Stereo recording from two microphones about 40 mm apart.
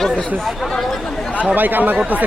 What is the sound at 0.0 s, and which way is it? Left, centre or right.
Speech, centre.